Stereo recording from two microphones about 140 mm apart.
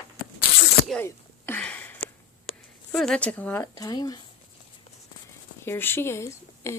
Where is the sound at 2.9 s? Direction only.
5° left (ahead or behind).